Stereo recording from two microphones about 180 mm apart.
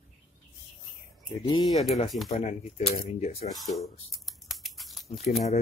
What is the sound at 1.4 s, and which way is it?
Speech, 25° left (ahead or behind).